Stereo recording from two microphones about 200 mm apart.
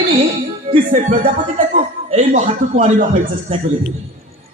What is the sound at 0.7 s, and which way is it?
Speech, 40° right (ahead or behind).